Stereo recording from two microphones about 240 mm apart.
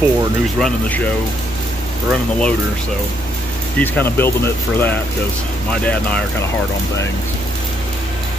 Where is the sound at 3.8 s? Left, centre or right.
Centre.